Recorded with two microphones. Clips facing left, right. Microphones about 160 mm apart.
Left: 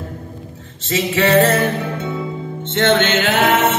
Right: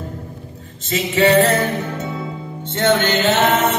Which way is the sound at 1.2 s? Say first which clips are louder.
Even; 40° left (ahead or behind).